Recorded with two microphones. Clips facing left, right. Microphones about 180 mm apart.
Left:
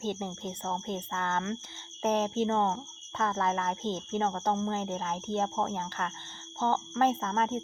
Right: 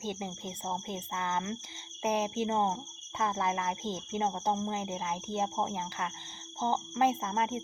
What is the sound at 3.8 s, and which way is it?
Speech, 10° right (ahead or behind).